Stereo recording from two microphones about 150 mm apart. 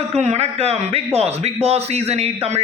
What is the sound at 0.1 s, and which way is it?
A man's voice, 45° right (ahead or behind).